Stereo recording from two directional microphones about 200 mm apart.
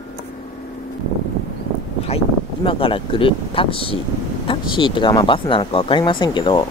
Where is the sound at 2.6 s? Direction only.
25° left (ahead or behind).